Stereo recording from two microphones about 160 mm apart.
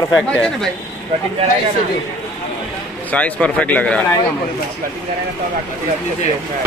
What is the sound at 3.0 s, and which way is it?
Speech, 10° left (ahead or behind).